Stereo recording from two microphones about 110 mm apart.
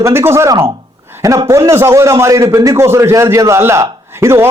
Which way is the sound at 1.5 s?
25° right (ahead or behind).